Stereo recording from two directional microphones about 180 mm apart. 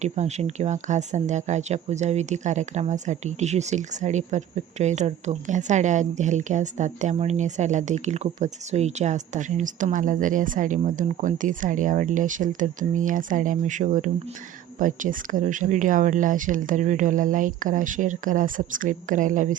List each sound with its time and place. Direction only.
0.0 s speech: 40° right (ahead or behind)